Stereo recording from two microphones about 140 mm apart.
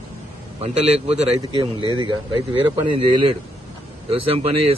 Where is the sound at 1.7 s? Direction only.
30° left (ahead or behind).